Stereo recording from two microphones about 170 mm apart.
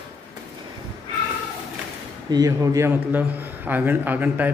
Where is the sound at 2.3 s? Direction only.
20° right (ahead or behind).